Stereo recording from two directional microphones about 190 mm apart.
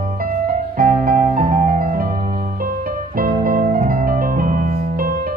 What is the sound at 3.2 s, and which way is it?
Music, 50° right (ahead or behind).